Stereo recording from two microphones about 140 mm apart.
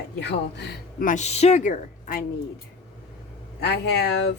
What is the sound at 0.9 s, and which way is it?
Speech, 65° left (ahead or behind).